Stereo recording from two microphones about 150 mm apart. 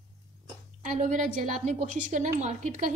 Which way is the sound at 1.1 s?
55° right (ahead or behind).